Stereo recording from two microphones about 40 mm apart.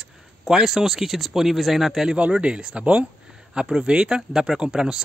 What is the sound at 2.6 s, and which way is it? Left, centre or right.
Speech, centre.